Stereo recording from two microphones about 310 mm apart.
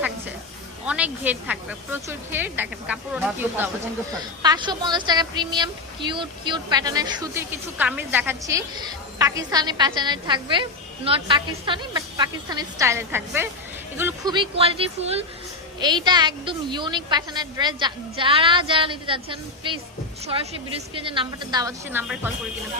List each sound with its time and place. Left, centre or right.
0.9 s a woman's voice: centre
20.9 s a woman's voice: centre